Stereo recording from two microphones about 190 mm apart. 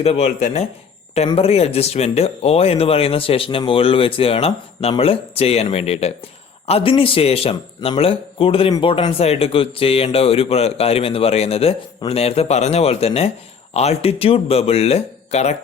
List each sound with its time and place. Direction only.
0.0 s a man's voice: 35° left (ahead or behind)